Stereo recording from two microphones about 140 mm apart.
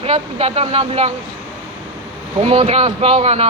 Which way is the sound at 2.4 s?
50° right (ahead or behind).